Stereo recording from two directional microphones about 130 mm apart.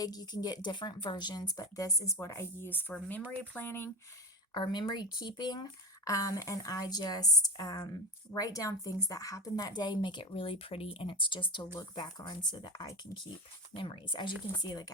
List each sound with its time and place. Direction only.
0.0 s a woman's voice: 30° left (ahead or behind)
4.5 s a woman's voice: 35° left (ahead or behind)